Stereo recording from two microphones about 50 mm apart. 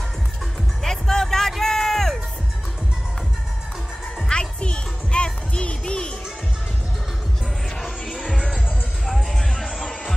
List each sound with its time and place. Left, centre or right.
0.8 s music: centre
1.5 s a sound: centre
4.3 s music: centre
8.3 s music: centre